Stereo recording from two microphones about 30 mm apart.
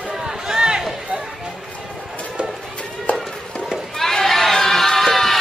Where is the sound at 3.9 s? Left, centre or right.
Centre.